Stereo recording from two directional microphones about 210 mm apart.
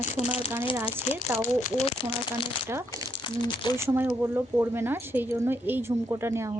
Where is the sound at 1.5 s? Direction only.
25° left (ahead or behind).